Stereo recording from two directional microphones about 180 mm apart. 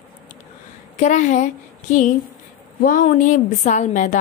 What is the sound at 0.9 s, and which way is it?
A woman's voice, 40° left (ahead or behind).